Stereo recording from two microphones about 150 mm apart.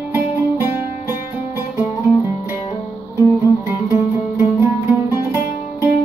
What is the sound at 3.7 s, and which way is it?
Music, 15° right (ahead or behind).